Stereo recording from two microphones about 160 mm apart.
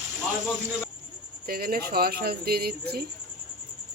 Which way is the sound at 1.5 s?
65° right (ahead or behind).